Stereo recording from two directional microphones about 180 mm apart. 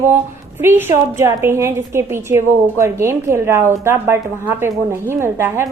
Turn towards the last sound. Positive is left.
turn(degrees=-15)  # may be behind; listen again after turning